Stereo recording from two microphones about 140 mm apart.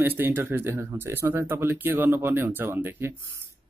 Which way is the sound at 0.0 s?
15° right (ahead or behind).